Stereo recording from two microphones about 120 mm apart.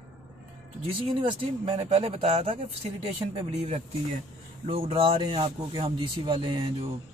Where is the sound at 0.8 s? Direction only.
50° right (ahead or behind).